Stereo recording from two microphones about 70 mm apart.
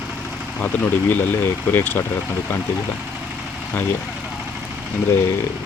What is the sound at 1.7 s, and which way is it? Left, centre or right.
Speech, left.